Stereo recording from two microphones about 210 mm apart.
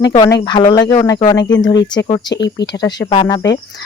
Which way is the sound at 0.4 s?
20° left (ahead or behind).